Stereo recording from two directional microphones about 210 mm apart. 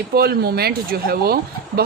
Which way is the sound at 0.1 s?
45° right (ahead or behind).